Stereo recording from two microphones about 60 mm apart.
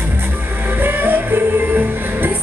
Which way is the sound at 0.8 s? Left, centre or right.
Right.